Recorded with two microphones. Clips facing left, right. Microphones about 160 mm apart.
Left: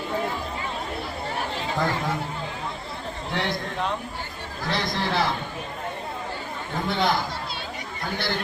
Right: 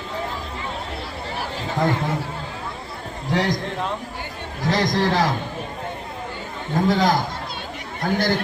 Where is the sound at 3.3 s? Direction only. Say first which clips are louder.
Right 6 dB; 40° right (ahead or behind).